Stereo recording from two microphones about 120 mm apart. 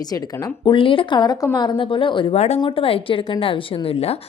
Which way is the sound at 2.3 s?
65° left (ahead or behind).